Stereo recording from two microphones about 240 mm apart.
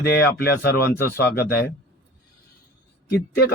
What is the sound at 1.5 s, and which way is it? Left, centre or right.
Speech, left.